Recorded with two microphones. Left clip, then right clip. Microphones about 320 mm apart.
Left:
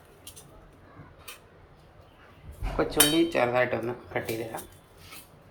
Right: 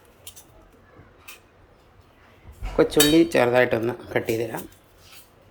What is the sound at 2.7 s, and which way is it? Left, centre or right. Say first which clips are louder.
Cutlery: right 7 dB; right.